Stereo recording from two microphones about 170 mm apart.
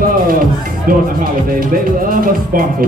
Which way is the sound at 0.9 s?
60° right (ahead or behind).